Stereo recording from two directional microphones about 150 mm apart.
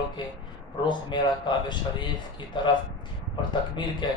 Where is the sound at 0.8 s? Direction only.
30° left (ahead or behind).